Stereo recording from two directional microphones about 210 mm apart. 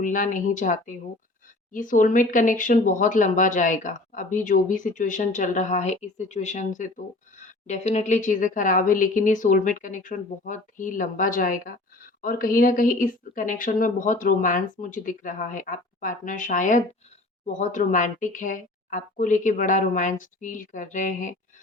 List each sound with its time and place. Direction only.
0.0 s speech: 40° left (ahead or behind)